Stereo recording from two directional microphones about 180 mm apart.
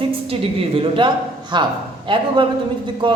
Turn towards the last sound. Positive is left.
turn(degrees=-25)  # may be behind; listen again after turning